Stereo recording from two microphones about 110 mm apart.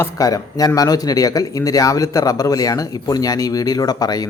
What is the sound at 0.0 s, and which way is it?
Speech, 30° left (ahead or behind).